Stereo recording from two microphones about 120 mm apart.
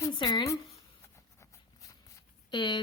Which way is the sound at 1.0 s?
25° left (ahead or behind).